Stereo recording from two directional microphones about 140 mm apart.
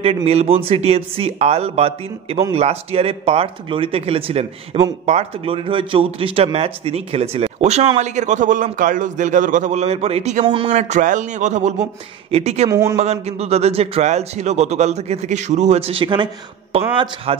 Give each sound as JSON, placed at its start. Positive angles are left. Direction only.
{"t": 0.0, "sound": "a man's voice", "side_deg": -45}
{"t": 10.4, "sound": "speech", "side_deg": -35}
{"t": 10.7, "sound": "a man's voice", "side_deg": -60}
{"t": 12.6, "sound": "speech", "side_deg": -20}
{"t": 12.9, "sound": "a man's voice", "side_deg": -50}